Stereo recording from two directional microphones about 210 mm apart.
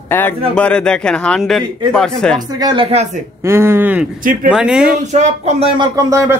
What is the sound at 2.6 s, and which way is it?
Speech, 25° right (ahead or behind).